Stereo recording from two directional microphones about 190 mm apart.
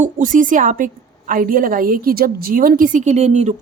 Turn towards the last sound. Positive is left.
turn(degrees=-35)  # may be behind; listen again after turning